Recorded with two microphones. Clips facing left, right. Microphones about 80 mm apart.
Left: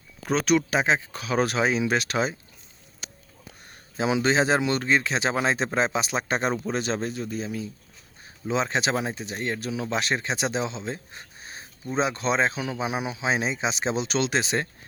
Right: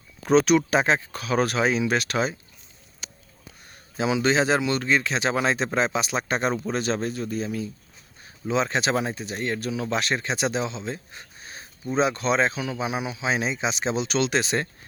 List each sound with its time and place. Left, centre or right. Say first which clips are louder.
0.3 s speech: right 4 dB; centre
1.1 s speech: right 1 dB; centre
3.0 s a sound: left 1 dB; left
3.9 s a man's voice: even; left
8.2 s a sound: right 2 dB; left
8.6 s a man's voice: right 1 dB; centre